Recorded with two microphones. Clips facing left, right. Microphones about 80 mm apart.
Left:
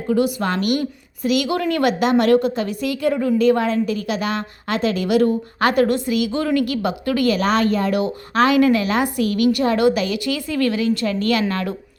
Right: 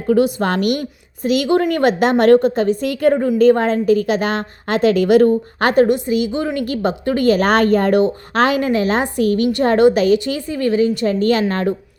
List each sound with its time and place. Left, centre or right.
0.1 s a woman's voice: right
10.5 s a woman's voice: right